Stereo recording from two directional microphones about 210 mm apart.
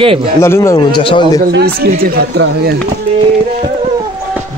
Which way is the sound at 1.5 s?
50° right (ahead or behind).